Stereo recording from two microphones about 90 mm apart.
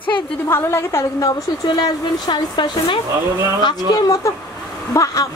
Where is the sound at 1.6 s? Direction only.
55° left (ahead or behind).